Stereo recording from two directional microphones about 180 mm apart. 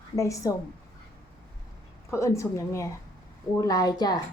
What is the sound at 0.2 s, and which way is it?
Speech, 15° left (ahead or behind).